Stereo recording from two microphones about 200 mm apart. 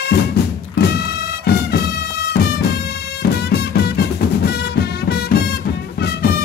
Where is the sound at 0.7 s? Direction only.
55° left (ahead or behind).